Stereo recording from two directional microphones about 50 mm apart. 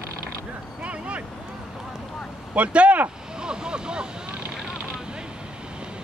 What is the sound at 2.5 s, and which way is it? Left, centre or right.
Speech, right.